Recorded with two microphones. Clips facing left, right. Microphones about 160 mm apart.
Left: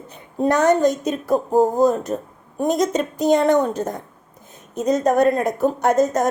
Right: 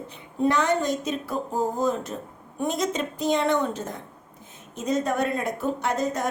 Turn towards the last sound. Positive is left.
turn(degrees=45)  # may be behind; listen again after turning